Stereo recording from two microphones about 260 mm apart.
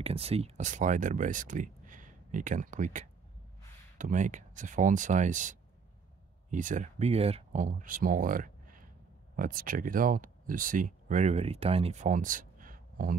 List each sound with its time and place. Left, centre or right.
0.0 s speech: right